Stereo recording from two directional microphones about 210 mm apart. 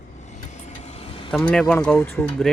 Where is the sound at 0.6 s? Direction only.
30° left (ahead or behind).